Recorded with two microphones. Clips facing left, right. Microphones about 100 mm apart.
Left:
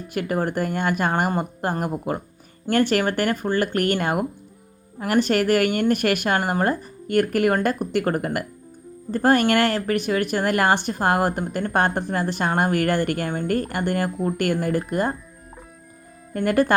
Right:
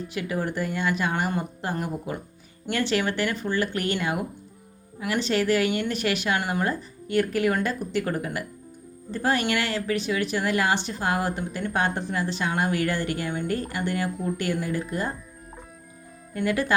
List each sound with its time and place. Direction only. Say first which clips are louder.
0.1 s speech: left 6 dB; 50° left (ahead or behind)
16.3 s speech: left 6 dB; 50° left (ahead or behind)